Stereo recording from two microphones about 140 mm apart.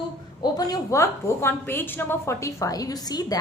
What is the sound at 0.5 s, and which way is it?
A woman's voice, 25° left (ahead or behind).